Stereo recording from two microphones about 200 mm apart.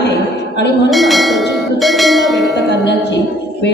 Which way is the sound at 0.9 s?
Centre (ahead or behind).